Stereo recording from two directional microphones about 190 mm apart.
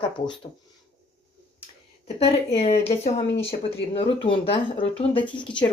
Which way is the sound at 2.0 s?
35° left (ahead or behind).